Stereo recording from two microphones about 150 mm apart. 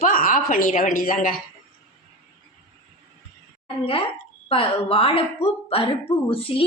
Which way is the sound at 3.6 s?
40° left (ahead or behind).